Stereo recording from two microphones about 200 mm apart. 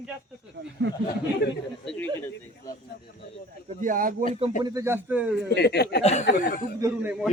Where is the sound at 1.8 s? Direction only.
10° left (ahead or behind).